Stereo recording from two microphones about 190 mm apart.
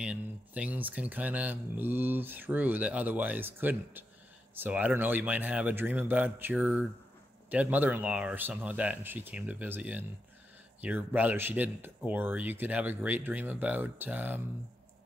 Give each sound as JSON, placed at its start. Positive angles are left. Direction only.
{"t": 0.0, "sound": "speech", "side_deg": -5}